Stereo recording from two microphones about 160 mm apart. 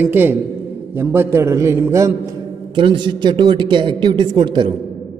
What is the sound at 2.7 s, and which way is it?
A woman's voice, 30° right (ahead or behind).